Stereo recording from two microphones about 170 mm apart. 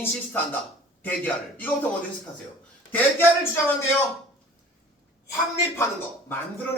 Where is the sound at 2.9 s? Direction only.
15° left (ahead or behind).